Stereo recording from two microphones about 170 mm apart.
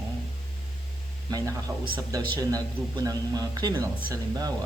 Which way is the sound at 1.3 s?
20° right (ahead or behind).